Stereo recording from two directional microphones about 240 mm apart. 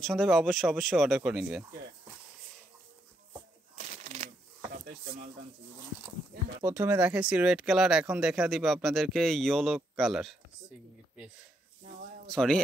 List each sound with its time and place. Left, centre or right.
0.0 s speech: centre
3.7 s a sound: right
6.6 s speech: centre
12.3 s speech: centre